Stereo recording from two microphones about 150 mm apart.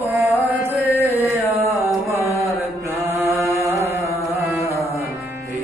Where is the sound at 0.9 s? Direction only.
15° right (ahead or behind).